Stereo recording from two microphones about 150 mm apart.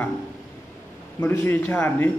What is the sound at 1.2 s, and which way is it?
Speech, 15° left (ahead or behind).